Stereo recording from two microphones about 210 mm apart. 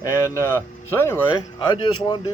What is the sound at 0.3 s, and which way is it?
Speech, 10° left (ahead or behind).